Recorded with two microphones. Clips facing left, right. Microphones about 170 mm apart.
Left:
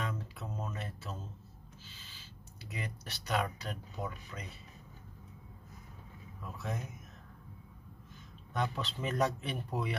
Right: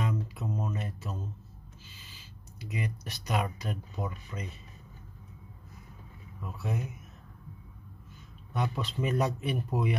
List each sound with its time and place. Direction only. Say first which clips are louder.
0.0 s a sound: right 6 dB; 10° right (ahead or behind)
2.7 s speech: right 6 dB; 15° right (ahead or behind)
6.4 s speech: right 4 dB; 10° right (ahead or behind)
8.5 s speech: right 3 dB; 10° right (ahead or behind)